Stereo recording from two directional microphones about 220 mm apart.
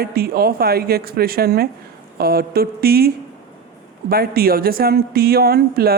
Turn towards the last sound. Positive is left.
turn(degrees=-45)  # may be behind; listen again after turning